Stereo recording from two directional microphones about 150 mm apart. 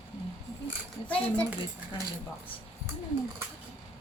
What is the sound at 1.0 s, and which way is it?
Speech, 10° left (ahead or behind).